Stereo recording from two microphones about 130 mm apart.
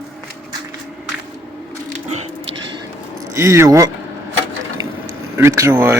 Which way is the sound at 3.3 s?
25° right (ahead or behind).